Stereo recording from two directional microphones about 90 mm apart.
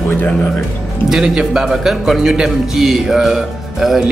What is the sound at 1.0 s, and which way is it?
A man's voice, 5° right (ahead or behind).